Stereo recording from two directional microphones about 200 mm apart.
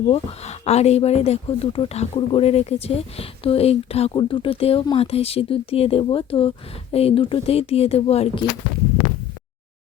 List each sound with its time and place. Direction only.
0.1 s speech: 30° left (ahead or behind)